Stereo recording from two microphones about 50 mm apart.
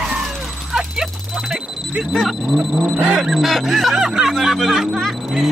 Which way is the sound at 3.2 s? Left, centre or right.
Centre.